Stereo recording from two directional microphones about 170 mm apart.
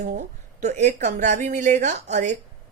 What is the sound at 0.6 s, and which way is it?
A woman's voice, 45° right (ahead or behind).